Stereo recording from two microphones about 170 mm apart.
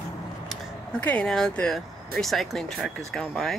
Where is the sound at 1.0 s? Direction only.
5° left (ahead or behind).